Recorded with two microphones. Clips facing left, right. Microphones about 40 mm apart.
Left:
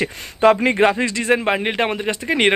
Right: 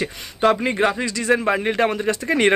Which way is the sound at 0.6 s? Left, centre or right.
Left.